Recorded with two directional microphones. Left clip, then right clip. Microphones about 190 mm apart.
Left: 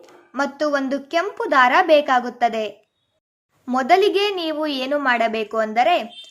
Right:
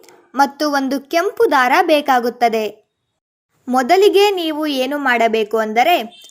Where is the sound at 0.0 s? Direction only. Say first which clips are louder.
Right 8 dB; 20° right (ahead or behind).